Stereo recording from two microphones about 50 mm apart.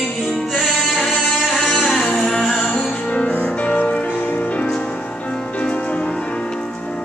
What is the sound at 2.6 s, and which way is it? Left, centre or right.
Music, left.